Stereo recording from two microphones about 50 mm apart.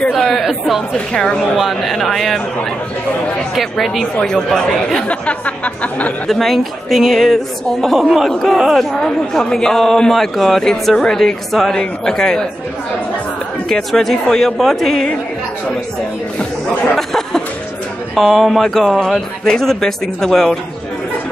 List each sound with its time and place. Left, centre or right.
0.3 s speech: centre
0.9 s a man's voice: centre
1.6 s speech: centre
3.5 s speech: centre
4.2 s a man's voice: centre
5.0 s a sound: left
6.2 s speech: centre
9.0 s a man's voice: centre
13.7 s a man's voice: centre
16.9 s a man's voice: centre